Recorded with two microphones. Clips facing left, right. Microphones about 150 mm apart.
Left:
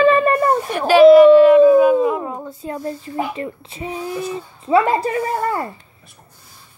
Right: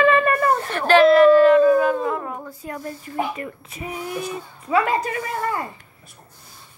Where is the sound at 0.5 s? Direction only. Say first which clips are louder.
Left 4 dB; 15° left (ahead or behind); by 5.6 s 30° left (ahead or behind).